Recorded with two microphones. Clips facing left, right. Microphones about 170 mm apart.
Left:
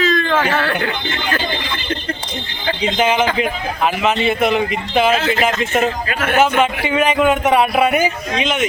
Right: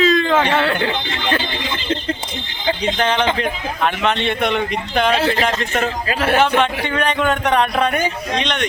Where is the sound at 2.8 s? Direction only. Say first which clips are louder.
Left 4 dB; 10° left (ahead or behind).